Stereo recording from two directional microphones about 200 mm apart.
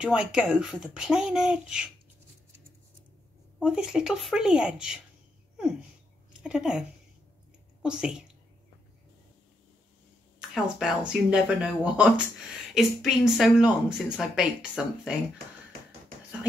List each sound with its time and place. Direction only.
0.0 s speech: 5° right (ahead or behind)
3.5 s speech: 5° right (ahead or behind)
10.5 s speech: 5° right (ahead or behind)